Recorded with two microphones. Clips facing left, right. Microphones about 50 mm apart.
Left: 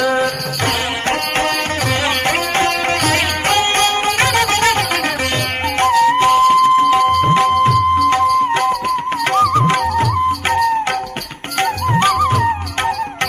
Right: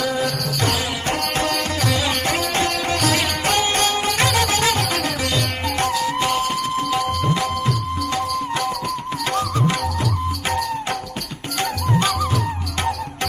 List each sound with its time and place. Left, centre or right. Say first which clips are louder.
0.0 s music: left 6 dB; left
2.2 s music: left 5 dB; left
5.8 s music: left 10 dB; left
11.6 s music: left 6 dB; left